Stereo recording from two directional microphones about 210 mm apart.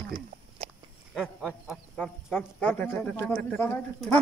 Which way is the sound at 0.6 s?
30° right (ahead or behind).